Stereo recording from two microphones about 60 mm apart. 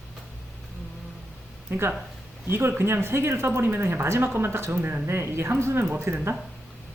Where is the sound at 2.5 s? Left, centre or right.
Right.